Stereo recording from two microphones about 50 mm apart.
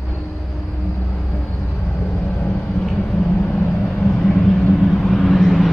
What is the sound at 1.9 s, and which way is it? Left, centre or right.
Vehicle, left.